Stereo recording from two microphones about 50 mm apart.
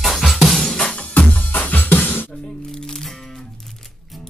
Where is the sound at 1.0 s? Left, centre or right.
Left.